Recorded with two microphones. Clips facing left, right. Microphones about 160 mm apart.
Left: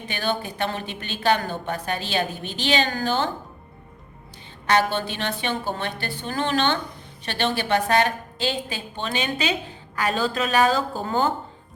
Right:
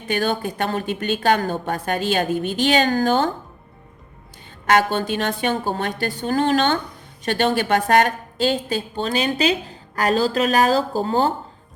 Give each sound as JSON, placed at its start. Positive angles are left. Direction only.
{"t": 0.1, "sound": "a woman's voice", "side_deg": -45}
{"t": 4.6, "sound": "a woman's voice", "side_deg": -45}